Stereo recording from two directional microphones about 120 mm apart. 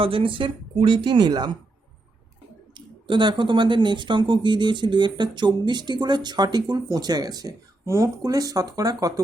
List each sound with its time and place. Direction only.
0.0 s speech: 50° right (ahead or behind)
2.7 s speech: 40° right (ahead or behind)